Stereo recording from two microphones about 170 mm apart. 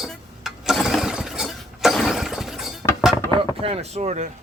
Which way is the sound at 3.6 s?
35° right (ahead or behind).